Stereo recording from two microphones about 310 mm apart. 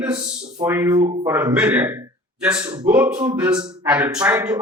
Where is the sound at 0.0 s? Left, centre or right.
Centre.